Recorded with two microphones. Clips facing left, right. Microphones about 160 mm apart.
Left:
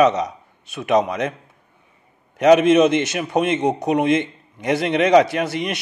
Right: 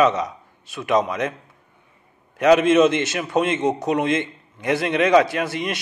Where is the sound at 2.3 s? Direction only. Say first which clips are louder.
Left 2 dB; 20° left (ahead or behind).